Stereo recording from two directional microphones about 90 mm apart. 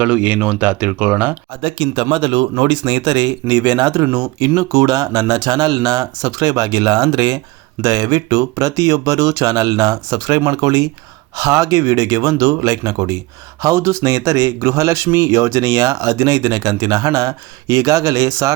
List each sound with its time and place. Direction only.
0.0 s speech: 15° right (ahead or behind)
1.6 s speech: 65° right (ahead or behind); by 18.5 s 35° right (ahead or behind)